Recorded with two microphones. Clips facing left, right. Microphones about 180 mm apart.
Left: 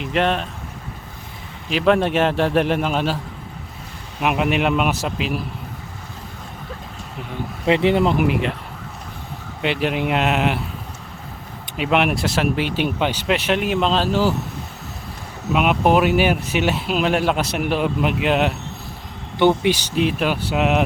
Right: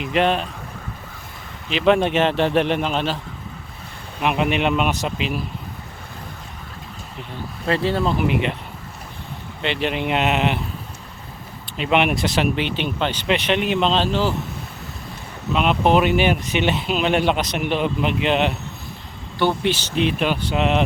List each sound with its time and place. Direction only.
0.0 s speech: centre (ahead or behind)
1.7 s speech: centre (ahead or behind)
4.2 s speech: 5° left (ahead or behind)
7.7 s speech: 20° left (ahead or behind)
9.6 s speech: 5° left (ahead or behind)
11.8 s speech: centre (ahead or behind)
15.5 s speech: 10° left (ahead or behind)
19.4 s speech: 15° left (ahead or behind)